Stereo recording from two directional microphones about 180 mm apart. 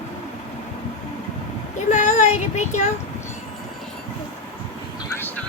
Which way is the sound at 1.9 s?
40° left (ahead or behind).